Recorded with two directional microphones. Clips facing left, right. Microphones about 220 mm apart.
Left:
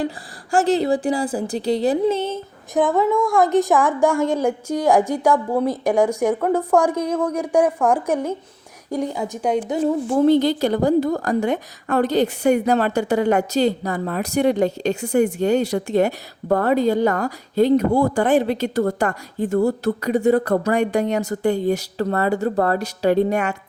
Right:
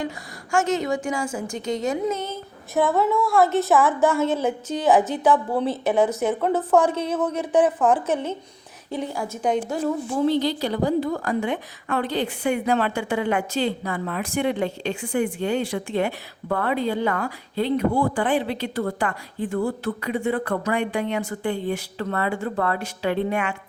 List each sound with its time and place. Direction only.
0.5 s a woman's voice: 35° left (ahead or behind)
3.0 s a woman's voice: 15° left (ahead or behind)
10.2 s a woman's voice: 50° left (ahead or behind)